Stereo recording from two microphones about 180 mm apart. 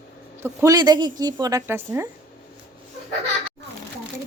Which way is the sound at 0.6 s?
20° right (ahead or behind).